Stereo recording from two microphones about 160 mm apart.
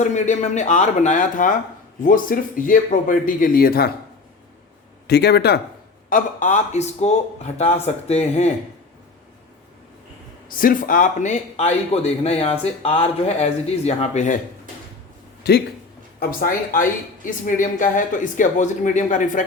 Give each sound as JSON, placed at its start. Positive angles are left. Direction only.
{"t": 0.0, "sound": "a man's voice", "side_deg": 50}
{"t": 5.0, "sound": "speech", "side_deg": 90}
{"t": 6.1, "sound": "a man's voice", "side_deg": 55}
{"t": 10.5, "sound": "a man's voice", "side_deg": 60}
{"t": 15.4, "sound": "speech", "side_deg": 90}
{"t": 16.2, "sound": "speech", "side_deg": 60}